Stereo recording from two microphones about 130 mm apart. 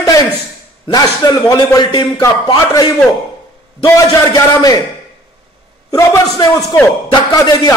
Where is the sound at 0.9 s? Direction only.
30° left (ahead or behind).